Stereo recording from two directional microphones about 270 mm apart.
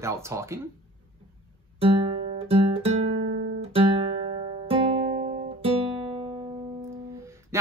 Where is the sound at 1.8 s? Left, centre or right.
Centre.